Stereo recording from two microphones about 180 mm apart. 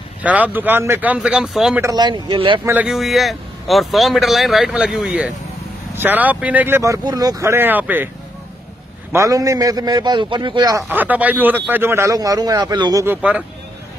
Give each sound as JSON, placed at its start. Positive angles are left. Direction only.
{"t": 0.2, "sound": "speech", "side_deg": -10}
{"t": 1.8, "sound": "a man's voice", "side_deg": -20}
{"t": 2.6, "sound": "speech", "side_deg": -10}
{"t": 9.1, "sound": "a man's voice", "side_deg": -15}
{"t": 10.9, "sound": "speech", "side_deg": -10}
{"t": 13.0, "sound": "speech", "side_deg": -10}